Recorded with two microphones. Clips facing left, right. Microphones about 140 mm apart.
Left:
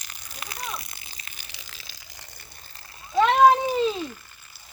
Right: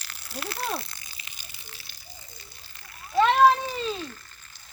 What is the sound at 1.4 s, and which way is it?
Water, 85° left.